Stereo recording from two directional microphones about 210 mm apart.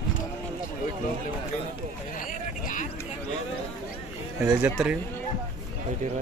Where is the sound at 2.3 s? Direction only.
40° left (ahead or behind).